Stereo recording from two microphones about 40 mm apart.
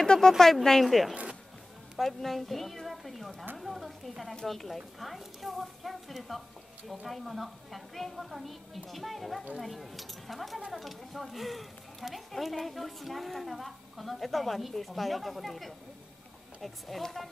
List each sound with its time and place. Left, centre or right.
0.0 s a woman's voice: centre